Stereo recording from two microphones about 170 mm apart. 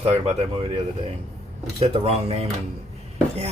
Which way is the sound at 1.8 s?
35° right (ahead or behind).